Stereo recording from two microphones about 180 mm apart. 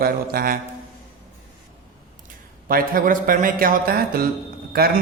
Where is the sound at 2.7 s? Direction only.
50° right (ahead or behind).